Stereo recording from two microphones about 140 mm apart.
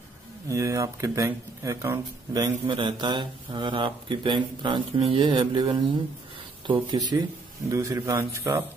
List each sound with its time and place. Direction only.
0.5 s speech: 25° right (ahead or behind)
2.6 s speech: 35° right (ahead or behind); by 8.6 s 20° right (ahead or behind)